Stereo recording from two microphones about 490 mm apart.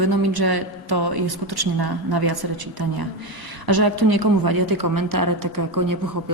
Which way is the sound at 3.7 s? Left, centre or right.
Right.